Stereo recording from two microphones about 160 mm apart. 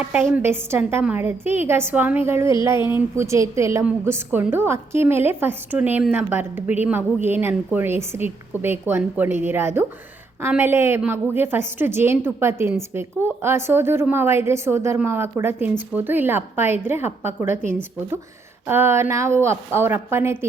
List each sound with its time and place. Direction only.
0.0 s a woman's voice: 10° right (ahead or behind)